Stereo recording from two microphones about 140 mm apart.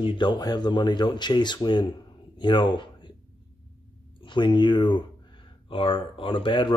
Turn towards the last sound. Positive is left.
turn(degrees=35)  # may be behind; listen again after turning